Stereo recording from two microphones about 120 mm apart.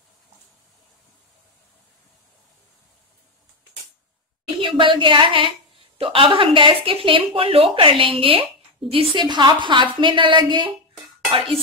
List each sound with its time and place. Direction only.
4.6 s a woman's voice: 45° right (ahead or behind)